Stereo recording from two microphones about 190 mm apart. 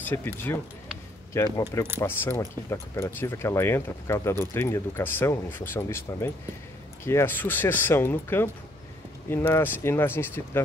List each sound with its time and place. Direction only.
0.0 s speech: 10° left (ahead or behind)